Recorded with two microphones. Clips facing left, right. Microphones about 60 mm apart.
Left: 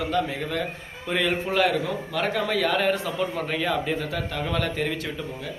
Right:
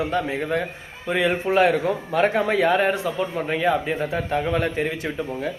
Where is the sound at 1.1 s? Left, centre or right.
Centre.